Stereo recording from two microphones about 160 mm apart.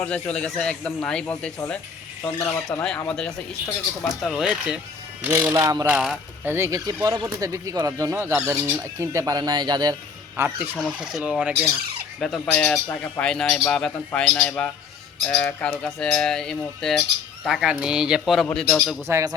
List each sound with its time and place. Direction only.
0.0 s speech: 10° left (ahead or behind); by 10.5 s 15° right (ahead or behind)
10.8 s speech: 5° right (ahead or behind)
19.0 s speech: 15° right (ahead or behind)